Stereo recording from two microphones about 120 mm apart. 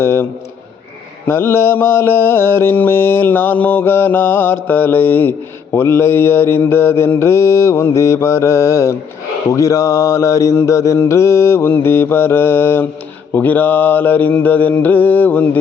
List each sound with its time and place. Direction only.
0.0 s mantra: 20° left (ahead or behind)
1.3 s mantra: 20° left (ahead or behind)